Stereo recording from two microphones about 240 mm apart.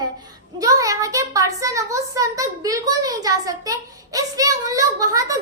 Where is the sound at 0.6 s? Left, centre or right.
Centre.